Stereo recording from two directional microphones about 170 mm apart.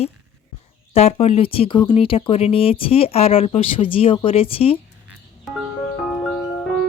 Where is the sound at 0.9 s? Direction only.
35° left (ahead or behind).